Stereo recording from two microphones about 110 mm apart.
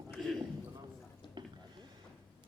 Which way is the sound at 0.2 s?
5° left (ahead or behind).